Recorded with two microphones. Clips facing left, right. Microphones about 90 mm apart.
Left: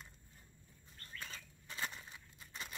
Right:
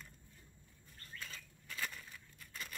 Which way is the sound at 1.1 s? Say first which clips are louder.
Left 1 dB; 30° left (ahead or behind).